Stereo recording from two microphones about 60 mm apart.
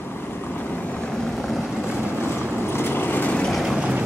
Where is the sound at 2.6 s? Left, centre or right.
Left.